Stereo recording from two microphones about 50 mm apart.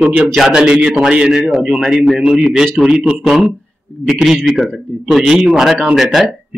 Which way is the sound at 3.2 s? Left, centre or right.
Centre.